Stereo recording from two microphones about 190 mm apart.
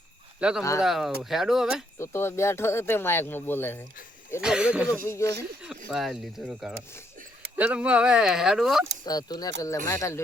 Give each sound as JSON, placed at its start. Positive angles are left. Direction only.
{"t": 0.3, "sound": "speech", "side_deg": -5}
{"t": 2.0, "sound": "speech", "side_deg": 15}
{"t": 4.4, "sound": "speech", "side_deg": -5}
{"t": 5.0, "sound": "speech", "side_deg": 15}
{"t": 5.9, "sound": "speech", "side_deg": 0}
{"t": 9.0, "sound": "speech", "side_deg": 20}